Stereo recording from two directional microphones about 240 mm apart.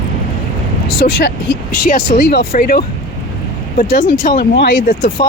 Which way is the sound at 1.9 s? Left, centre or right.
Left.